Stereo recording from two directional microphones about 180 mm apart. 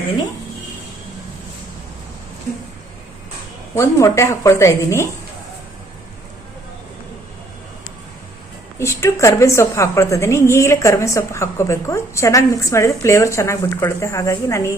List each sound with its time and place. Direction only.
3.8 s a woman's voice: 15° left (ahead or behind)
8.8 s a woman's voice: 15° left (ahead or behind)